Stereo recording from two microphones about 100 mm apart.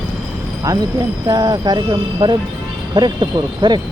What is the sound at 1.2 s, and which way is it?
Speech, 40° right (ahead or behind).